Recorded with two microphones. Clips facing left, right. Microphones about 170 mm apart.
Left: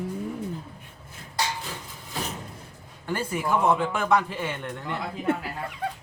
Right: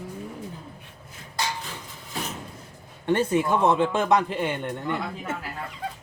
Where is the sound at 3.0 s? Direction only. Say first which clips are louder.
Right 6 dB; 25° right (ahead or behind).